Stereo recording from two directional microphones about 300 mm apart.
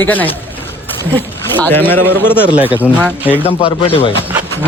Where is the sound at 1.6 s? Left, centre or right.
Centre.